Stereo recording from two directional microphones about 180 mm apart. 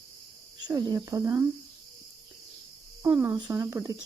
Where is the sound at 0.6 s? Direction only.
20° right (ahead or behind).